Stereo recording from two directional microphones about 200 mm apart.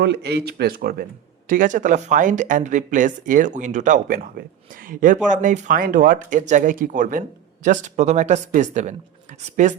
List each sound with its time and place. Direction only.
0.0 s speech: 55° right (ahead or behind); by 9.7 s 40° right (ahead or behind)